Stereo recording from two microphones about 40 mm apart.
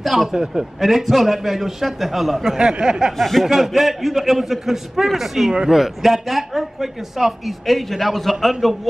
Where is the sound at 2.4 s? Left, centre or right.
Centre.